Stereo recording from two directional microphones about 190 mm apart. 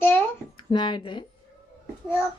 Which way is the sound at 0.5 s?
25° left (ahead or behind).